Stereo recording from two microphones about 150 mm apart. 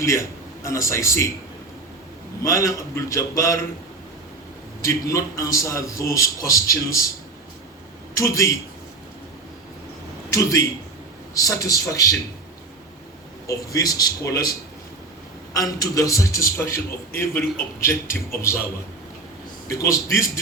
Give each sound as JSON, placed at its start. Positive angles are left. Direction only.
{"t": 0.0, "sound": "a man's voice", "side_deg": 20}
{"t": 2.4, "sound": "a man's voice", "side_deg": 20}
{"t": 4.8, "sound": "a man's voice", "side_deg": 20}
{"t": 8.1, "sound": "a man's voice", "side_deg": 20}
{"t": 11.3, "sound": "a man's voice", "side_deg": 20}
{"t": 13.5, "sound": "a man's voice", "side_deg": 25}
{"t": 15.5, "sound": "a man's voice", "side_deg": 25}
{"t": 19.7, "sound": "a man's voice", "side_deg": 20}